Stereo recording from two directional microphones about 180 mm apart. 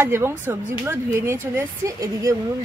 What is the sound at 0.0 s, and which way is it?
A woman's voice, 15° right (ahead or behind).